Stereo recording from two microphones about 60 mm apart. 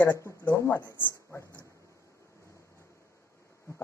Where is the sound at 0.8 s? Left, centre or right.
Left.